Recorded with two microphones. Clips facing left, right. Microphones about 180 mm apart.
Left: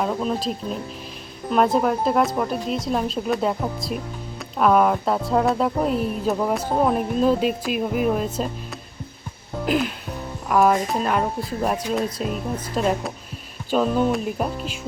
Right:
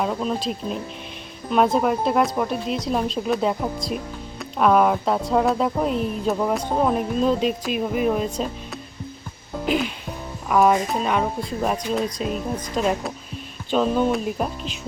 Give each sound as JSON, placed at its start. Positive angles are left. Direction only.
{"t": 0.0, "sound": "speech", "side_deg": 0}